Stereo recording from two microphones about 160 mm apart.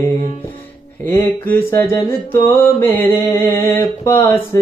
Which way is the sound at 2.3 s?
15° left (ahead or behind).